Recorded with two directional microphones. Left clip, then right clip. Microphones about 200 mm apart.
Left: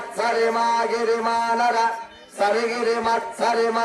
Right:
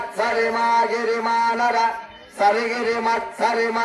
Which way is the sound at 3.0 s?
25° right (ahead or behind).